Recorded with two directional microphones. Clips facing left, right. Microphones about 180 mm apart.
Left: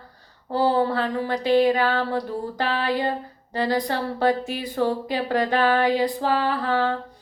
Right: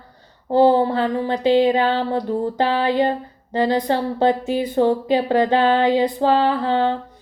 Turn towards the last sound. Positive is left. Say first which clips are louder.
# right 4 dB
turn(degrees=-25)  # may be behind; listen again after turning